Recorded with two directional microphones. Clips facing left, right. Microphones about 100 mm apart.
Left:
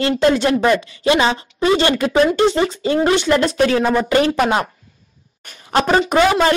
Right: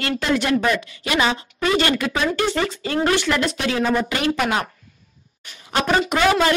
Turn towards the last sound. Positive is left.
turn(degrees=30)  # may be behind; listen again after turning